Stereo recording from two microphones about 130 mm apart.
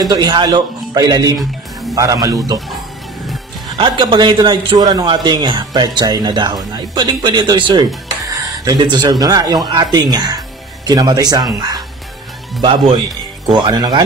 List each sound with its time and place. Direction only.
0.0 s a man's voice: 30° right (ahead or behind)
1.4 s music: centre (ahead or behind)
2.0 s a man's voice: 25° right (ahead or behind)
3.7 s a man's voice: 40° right (ahead or behind)
12.6 s a man's voice: 40° right (ahead or behind)